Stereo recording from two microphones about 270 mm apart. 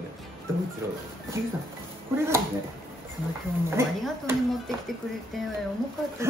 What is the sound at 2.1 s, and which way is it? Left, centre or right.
Speech, centre.